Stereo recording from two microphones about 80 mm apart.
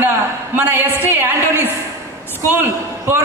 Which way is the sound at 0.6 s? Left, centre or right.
Right.